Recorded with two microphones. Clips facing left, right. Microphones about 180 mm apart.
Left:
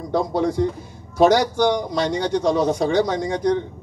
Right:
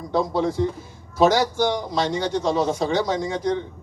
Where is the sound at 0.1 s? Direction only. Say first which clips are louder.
Left 1 dB; 50° left (ahead or behind).